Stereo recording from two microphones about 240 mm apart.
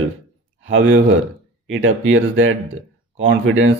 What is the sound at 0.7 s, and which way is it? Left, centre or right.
Speech, right.